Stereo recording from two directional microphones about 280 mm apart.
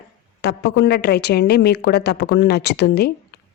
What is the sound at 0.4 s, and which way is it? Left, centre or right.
Speech, left.